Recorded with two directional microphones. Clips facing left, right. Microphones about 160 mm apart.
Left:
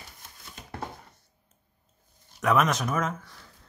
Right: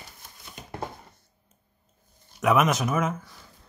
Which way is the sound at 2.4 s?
5° right (ahead or behind).